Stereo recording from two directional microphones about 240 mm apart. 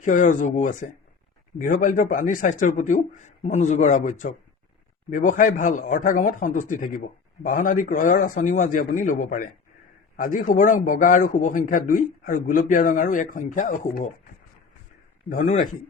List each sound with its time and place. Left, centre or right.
0.0 s a man's voice: left
15.3 s a man's voice: left